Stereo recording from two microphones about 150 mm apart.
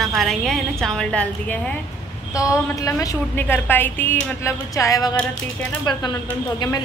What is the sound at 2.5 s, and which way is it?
A woman's voice, 20° left (ahead or behind).